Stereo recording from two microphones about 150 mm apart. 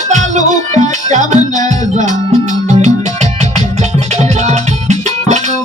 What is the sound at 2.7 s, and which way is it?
Music, 50° right (ahead or behind).